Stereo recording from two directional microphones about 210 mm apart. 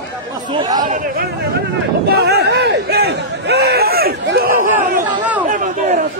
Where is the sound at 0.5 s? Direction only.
20° right (ahead or behind).